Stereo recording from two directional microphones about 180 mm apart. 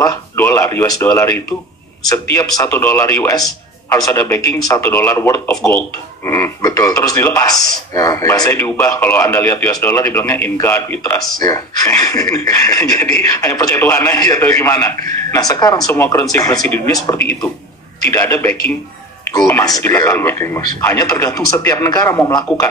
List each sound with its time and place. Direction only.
0.0 s speech: 15° left (ahead or behind)